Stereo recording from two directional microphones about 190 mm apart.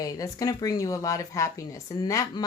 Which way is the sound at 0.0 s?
20° left (ahead or behind).